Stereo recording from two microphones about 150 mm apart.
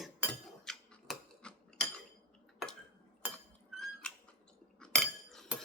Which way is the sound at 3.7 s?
Centre (ahead or behind).